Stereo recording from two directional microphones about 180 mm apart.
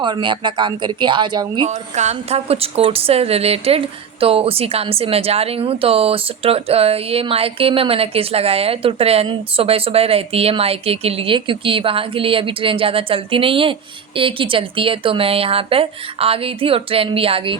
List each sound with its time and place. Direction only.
0.0 s speech: 25° right (ahead or behind)
1.6 s a woman's voice: 40° right (ahead or behind)